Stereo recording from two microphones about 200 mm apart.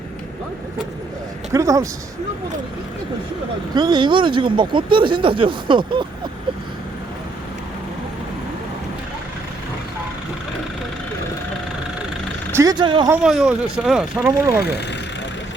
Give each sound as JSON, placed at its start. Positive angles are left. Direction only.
{"t": 1.5, "sound": "speech", "side_deg": -15}
{"t": 3.8, "sound": "speech", "side_deg": -20}
{"t": 12.5, "sound": "speech", "side_deg": -20}
{"t": 13.1, "sound": "speech", "side_deg": -5}
{"t": 14.3, "sound": "speech", "side_deg": -15}